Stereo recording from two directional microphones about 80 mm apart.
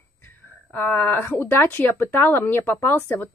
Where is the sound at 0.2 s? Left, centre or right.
Left.